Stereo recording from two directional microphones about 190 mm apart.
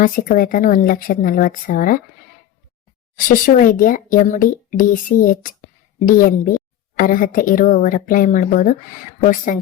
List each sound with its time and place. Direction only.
0.0 s speech: 45° left (ahead or behind)
3.2 s speech: 45° left (ahead or behind)